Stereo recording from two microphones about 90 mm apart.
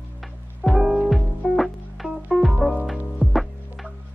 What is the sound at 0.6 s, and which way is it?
Music, centre (ahead or behind).